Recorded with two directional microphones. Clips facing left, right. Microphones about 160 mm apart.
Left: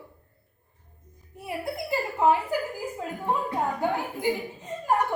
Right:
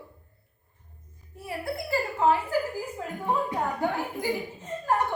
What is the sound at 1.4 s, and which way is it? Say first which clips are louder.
A woman's voice: left 1 dB; 20° left (ahead or behind).